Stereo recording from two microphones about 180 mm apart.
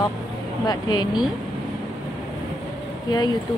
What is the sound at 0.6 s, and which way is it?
Speech, 25° left (ahead or behind).